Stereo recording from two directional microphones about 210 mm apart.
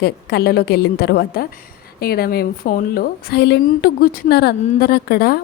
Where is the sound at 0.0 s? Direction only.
50° left (ahead or behind).